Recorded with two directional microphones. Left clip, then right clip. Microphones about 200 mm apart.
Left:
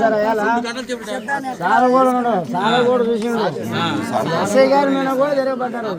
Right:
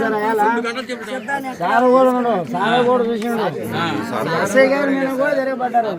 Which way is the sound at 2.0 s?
20° right (ahead or behind).